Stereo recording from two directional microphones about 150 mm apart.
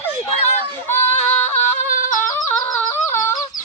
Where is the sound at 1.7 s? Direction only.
60° left (ahead or behind).